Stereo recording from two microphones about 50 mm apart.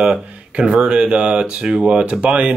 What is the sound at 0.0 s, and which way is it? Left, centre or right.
Speech, centre.